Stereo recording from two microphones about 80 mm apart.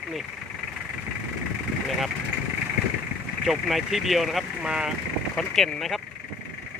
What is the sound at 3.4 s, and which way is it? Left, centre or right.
Speech, centre.